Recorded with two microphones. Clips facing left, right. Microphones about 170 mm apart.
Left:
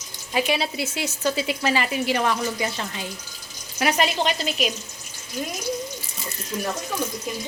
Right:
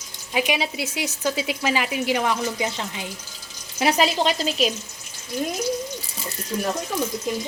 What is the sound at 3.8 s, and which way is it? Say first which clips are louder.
Speech: right 2 dB; 30° right (ahead or behind).